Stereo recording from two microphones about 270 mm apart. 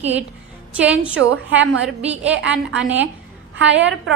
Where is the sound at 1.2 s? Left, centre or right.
Right.